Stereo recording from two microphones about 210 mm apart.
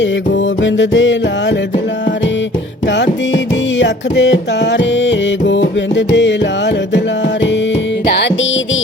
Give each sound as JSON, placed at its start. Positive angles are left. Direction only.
{"t": 0.6, "sound": "music", "side_deg": 60}
{"t": 2.8, "sound": "music", "side_deg": 55}
{"t": 8.0, "sound": "music", "side_deg": 55}